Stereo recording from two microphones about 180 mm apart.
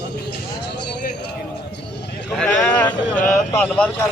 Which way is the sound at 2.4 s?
5° left (ahead or behind).